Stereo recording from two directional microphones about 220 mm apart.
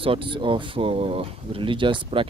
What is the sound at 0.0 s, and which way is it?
Speech, 25° right (ahead or behind).